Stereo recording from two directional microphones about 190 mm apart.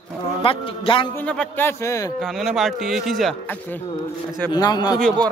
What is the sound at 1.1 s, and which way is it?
Speech, 5° left (ahead or behind).